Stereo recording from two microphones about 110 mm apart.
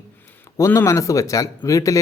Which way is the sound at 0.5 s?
25° left (ahead or behind).